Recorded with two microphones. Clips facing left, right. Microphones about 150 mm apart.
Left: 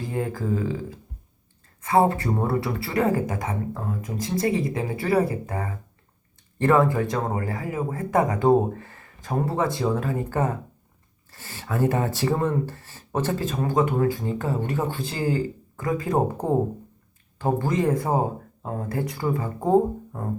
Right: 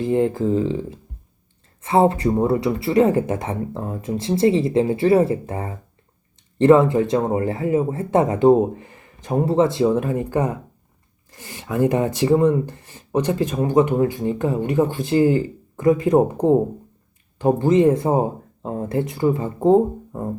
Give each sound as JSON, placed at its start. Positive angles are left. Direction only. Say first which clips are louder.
{"t": 0.0, "sound": "speech", "louder": "right 9 dB", "side_deg": -25}
{"t": 17.3, "sound": "speech", "louder": "right 8 dB", "side_deg": -20}